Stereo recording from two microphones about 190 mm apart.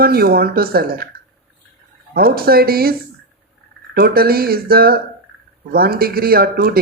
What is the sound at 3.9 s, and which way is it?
Speech, 55° right (ahead or behind).